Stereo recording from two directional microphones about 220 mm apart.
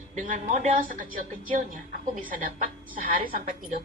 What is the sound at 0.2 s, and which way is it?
A woman's voice, 35° right (ahead or behind).